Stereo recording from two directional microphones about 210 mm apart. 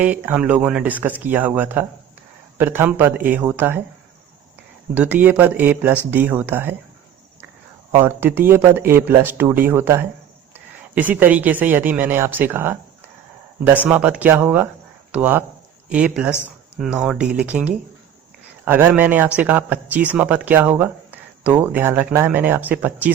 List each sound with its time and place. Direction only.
0.0 s speech: 5° right (ahead or behind)
4.9 s speech: 10° right (ahead or behind)
7.9 s speech: 10° right (ahead or behind)